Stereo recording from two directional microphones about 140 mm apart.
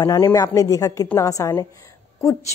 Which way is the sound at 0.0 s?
25° left (ahead or behind).